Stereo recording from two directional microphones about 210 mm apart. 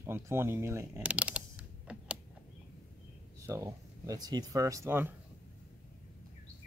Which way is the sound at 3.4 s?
15° right (ahead or behind).